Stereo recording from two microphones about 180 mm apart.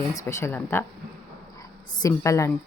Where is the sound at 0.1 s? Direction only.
15° left (ahead or behind).